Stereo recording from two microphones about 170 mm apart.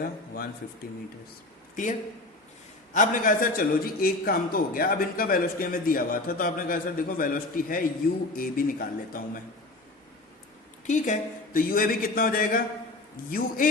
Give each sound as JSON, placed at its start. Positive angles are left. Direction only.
{"t": 0.0, "sound": "a man's voice", "side_deg": 60}
{"t": 1.7, "sound": "a man's voice", "side_deg": 50}
{"t": 10.8, "sound": "a man's voice", "side_deg": 45}